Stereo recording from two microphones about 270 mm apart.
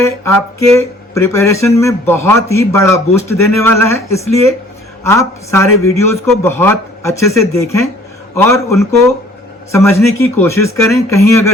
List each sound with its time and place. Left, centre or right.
0.0 s a man's voice: centre